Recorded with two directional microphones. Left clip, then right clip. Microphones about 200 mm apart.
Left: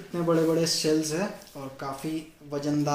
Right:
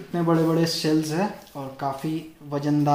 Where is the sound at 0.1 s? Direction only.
40° right (ahead or behind).